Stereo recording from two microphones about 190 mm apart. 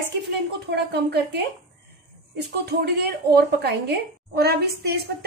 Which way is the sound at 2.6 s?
55° right (ahead or behind).